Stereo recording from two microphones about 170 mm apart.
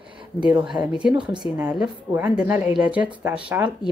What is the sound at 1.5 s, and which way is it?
Speech, 5° right (ahead or behind).